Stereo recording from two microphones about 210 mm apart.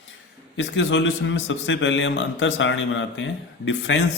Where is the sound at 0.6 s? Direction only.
60° left (ahead or behind).